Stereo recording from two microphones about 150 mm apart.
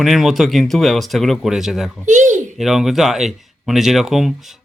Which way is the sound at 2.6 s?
Centre (ahead or behind).